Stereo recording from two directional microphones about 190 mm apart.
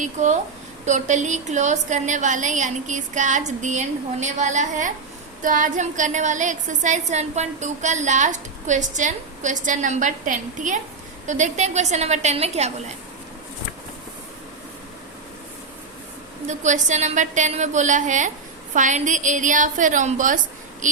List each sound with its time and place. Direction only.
0.0 s a woman's voice: 40° right (ahead or behind)
16.5 s a woman's voice: 40° right (ahead or behind)